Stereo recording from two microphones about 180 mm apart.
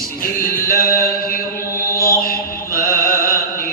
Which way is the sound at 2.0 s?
55° left (ahead or behind).